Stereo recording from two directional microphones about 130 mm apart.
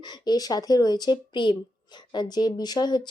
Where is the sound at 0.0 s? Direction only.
35° left (ahead or behind).